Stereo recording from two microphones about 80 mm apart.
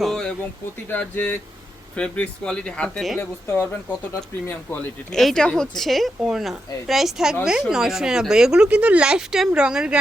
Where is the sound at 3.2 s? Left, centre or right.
Left.